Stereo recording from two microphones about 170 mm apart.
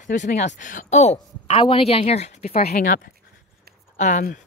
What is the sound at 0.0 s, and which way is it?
A woman's voice, 45° left (ahead or behind).